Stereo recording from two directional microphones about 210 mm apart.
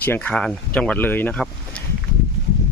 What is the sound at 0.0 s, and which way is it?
Speech, 10° left (ahead or behind).